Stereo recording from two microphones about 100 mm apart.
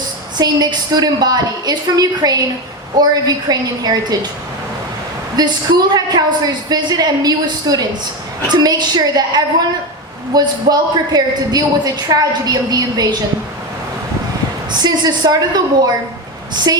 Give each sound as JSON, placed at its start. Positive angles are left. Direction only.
{"t": 0.3, "sound": "a woman's voice", "side_deg": -45}
{"t": 5.4, "sound": "a woman's voice", "side_deg": -45}
{"t": 14.7, "sound": "a woman's voice", "side_deg": -45}